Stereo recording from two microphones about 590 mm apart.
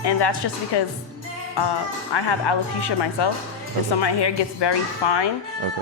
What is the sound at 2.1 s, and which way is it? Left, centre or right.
A woman's voice, left.